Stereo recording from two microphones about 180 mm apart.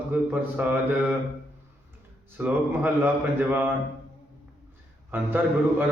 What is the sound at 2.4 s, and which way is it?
Speech, 10° right (ahead or behind).